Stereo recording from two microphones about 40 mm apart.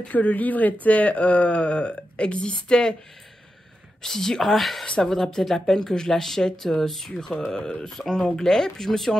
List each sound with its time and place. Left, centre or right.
0.1 s speech: left
2.5 s speech: centre
4.0 s speech: centre
4.8 s speech: centre